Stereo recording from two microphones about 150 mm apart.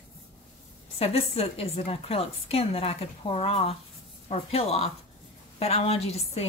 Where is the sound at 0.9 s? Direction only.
40° left (ahead or behind).